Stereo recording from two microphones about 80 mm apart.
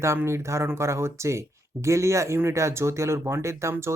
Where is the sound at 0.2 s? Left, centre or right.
Right.